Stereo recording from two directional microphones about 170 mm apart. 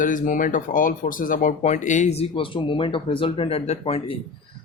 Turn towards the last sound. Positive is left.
turn(degrees=35)  # may be behind; listen again after turning